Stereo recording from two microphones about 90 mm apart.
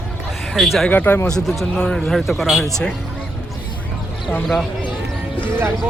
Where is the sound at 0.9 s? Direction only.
20° left (ahead or behind).